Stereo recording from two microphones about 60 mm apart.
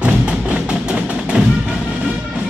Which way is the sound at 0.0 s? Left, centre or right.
Centre.